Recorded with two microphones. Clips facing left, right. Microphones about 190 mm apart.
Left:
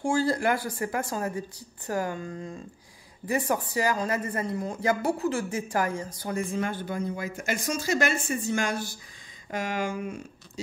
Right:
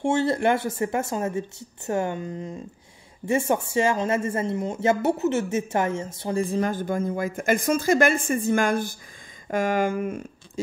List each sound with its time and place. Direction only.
0.0 s speech: 25° right (ahead or behind); by 10.6 s 50° right (ahead or behind)